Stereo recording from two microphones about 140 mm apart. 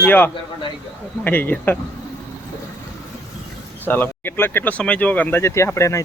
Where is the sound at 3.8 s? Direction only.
15° left (ahead or behind).